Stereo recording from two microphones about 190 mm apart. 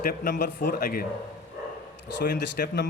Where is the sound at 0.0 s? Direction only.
50° left (ahead or behind).